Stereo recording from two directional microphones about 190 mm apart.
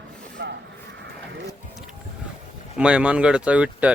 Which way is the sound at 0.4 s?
60° right (ahead or behind).